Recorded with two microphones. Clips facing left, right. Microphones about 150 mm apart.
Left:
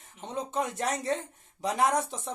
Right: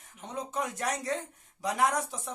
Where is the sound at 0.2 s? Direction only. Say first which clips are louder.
Left 3 dB; 25° left (ahead or behind).